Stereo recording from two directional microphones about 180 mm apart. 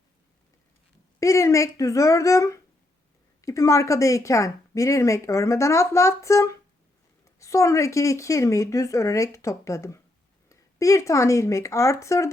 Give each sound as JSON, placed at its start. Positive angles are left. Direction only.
{"t": 1.2, "sound": "a woman's voice", "side_deg": 15}